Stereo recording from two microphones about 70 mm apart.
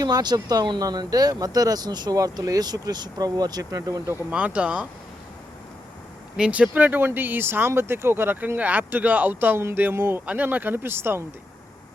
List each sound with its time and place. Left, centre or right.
0.0 s speech: right
4.3 s speech: centre
6.3 s speech: centre; by 10.2 s right
10.2 s speech: right